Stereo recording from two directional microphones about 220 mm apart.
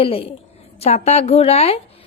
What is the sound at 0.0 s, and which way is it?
Speech, 25° left (ahead or behind).